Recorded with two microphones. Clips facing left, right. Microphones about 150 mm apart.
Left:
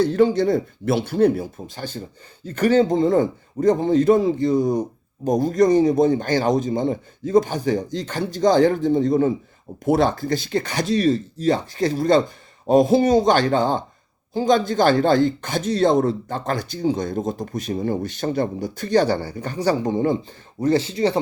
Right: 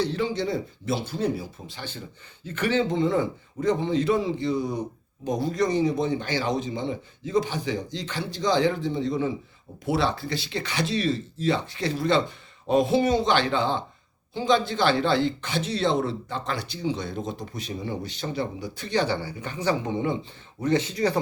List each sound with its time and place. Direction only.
0.0 s a man's voice: 50° left (ahead or behind); by 21.2 s 25° left (ahead or behind)